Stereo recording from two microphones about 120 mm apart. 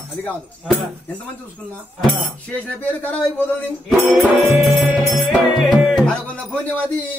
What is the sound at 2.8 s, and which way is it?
Speech, 15° left (ahead or behind).